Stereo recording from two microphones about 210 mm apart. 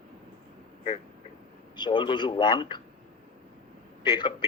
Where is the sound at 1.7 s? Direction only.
20° left (ahead or behind).